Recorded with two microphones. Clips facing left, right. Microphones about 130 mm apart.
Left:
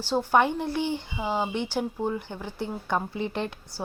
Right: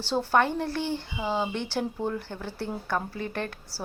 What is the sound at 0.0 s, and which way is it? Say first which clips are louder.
A woman's voice: left 2 dB; 15° left (ahead or behind).